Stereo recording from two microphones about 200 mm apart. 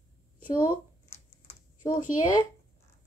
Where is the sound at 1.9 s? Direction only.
40° left (ahead or behind).